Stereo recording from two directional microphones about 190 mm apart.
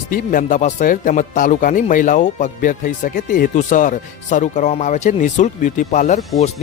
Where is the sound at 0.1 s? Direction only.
45° left (ahead or behind).